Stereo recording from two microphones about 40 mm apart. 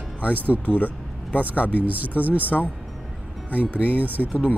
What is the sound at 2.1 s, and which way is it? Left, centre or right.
Speech, right.